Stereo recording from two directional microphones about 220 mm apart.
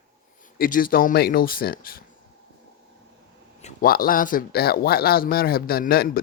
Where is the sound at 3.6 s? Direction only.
40° left (ahead or behind).